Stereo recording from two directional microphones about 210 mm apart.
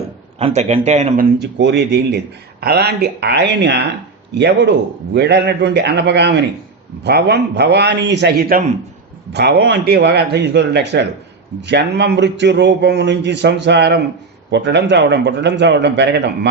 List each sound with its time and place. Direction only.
0.3 s speech: 30° right (ahead or behind)
1.5 s a man's voice: 55° right (ahead or behind)